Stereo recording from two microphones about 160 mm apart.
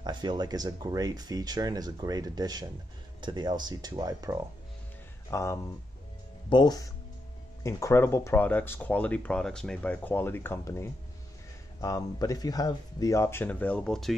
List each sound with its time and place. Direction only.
0.0 s speech: 30° right (ahead or behind)
5.3 s speech: 20° left (ahead or behind)